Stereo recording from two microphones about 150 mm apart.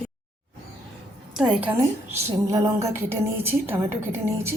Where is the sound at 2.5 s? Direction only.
20° right (ahead or behind).